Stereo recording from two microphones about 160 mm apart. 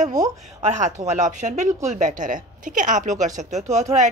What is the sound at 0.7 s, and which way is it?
Speech, 50° right (ahead or behind).